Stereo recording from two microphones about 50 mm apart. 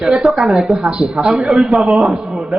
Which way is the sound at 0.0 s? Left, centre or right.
Centre.